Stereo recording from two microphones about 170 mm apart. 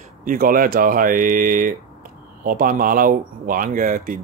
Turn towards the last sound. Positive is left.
turn(degrees=-55)  # may be behind; listen again after turning